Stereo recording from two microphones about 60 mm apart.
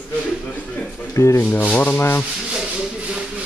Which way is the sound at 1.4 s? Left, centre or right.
Left.